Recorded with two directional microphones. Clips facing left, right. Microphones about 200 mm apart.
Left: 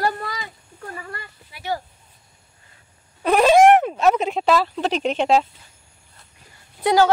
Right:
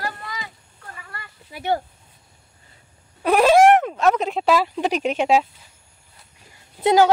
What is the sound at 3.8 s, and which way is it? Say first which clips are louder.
Speech: left 1 dB; 10° left (ahead or behind).